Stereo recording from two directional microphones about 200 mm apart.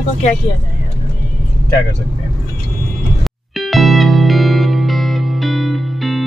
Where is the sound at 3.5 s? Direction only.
Centre (ahead or behind).